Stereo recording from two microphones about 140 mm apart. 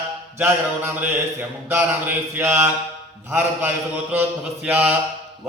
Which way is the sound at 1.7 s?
15° right (ahead or behind).